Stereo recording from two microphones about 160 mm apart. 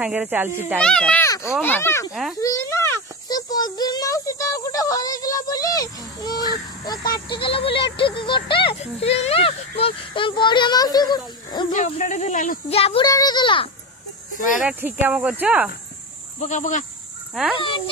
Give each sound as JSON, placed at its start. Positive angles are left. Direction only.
{"t": 0.0, "sound": "speech", "side_deg": -10}
{"t": 0.7, "sound": "a child's voice", "side_deg": 5}
{"t": 1.2, "sound": "a sound", "side_deg": 20}
{"t": 1.6, "sound": "speech", "side_deg": 15}
{"t": 2.4, "sound": "a sound", "side_deg": 15}
{"t": 7.4, "sound": "speech", "side_deg": 35}
{"t": 11.7, "sound": "speech", "side_deg": 50}
{"t": 12.6, "sound": "speech", "side_deg": 35}
{"t": 13.0, "sound": "speech", "side_deg": 25}
{"t": 14.3, "sound": "a sound", "side_deg": 55}
{"t": 14.6, "sound": "speech", "side_deg": -10}
{"t": 16.3, "sound": "speech", "side_deg": 50}
{"t": 17.3, "sound": "speech", "side_deg": 0}
{"t": 17.6, "sound": "speech", "side_deg": 30}